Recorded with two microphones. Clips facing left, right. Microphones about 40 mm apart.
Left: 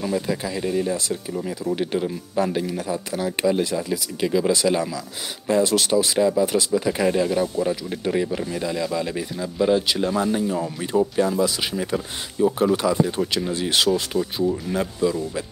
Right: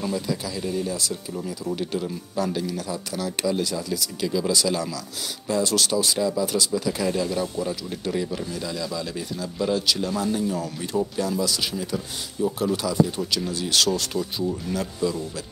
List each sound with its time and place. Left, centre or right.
0.1 s speech: left